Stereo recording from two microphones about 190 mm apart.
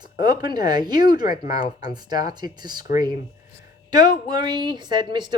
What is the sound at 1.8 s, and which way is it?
A woman's voice, 20° right (ahead or behind).